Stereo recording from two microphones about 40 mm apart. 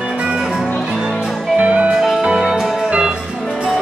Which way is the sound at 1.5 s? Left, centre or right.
Right.